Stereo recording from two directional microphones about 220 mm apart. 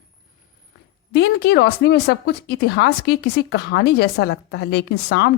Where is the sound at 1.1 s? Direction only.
50° left (ahead or behind).